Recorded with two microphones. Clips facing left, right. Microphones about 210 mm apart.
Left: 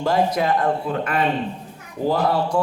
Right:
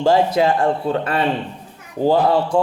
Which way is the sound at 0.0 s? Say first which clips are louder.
Right 5 dB; 25° right (ahead or behind).